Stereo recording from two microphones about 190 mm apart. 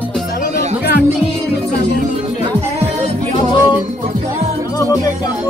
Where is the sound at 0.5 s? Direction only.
55° left (ahead or behind).